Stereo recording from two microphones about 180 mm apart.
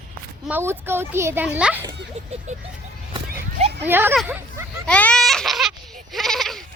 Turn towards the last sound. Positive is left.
turn(degrees=0)  # may be behind; listen again after turning